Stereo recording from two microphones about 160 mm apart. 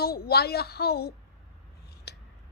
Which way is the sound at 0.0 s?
75° left (ahead or behind).